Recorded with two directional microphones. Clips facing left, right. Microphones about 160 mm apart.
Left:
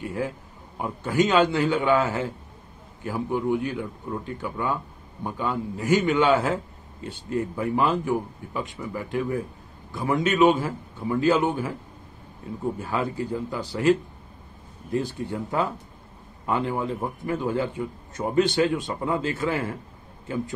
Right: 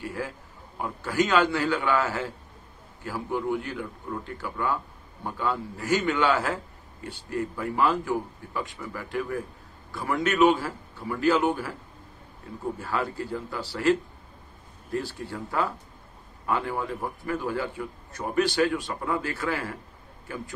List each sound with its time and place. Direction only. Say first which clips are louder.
0.0 s a man's voice: left 4 dB; 20° left (ahead or behind)